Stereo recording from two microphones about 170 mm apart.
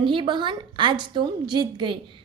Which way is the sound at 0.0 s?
30° right (ahead or behind).